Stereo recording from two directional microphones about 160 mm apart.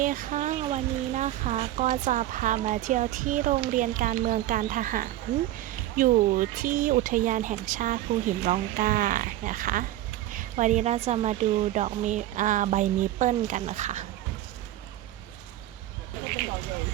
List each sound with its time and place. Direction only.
0.0 s speech: 55° right (ahead or behind)